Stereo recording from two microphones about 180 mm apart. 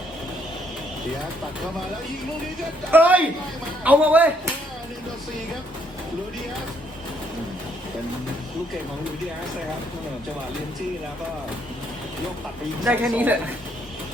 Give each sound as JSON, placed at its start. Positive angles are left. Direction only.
{"t": 2.9, "sound": "speech", "side_deg": -10}
{"t": 12.8, "sound": "speech", "side_deg": -10}